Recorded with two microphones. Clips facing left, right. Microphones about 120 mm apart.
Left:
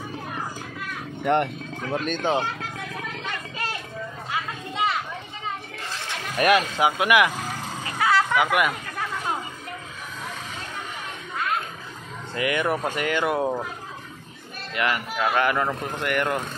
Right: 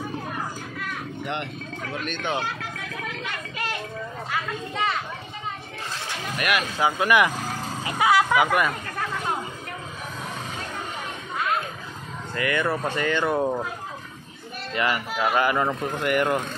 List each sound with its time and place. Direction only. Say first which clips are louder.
1.2 s speech: left 11 dB; 50° left (ahead or behind)
2.0 s speech: left 5 dB; 40° left (ahead or behind)
6.3 s speech: left 6 dB; 30° left (ahead or behind)
6.8 s speech: left 1 dB; 15° left (ahead or behind)
7.8 s dog: right 2 dB; 15° right (ahead or behind)
8.5 s speech: even; 5° left (ahead or behind)
12.4 s speech: left 1 dB; 15° left (ahead or behind)
14.7 s speech: even; centre (ahead or behind)
15.1 s speech: even; 10° right (ahead or behind)